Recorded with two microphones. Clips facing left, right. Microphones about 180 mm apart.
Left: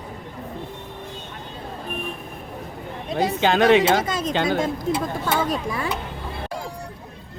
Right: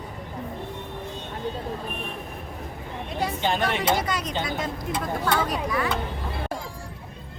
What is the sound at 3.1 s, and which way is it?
Speech, 90° left.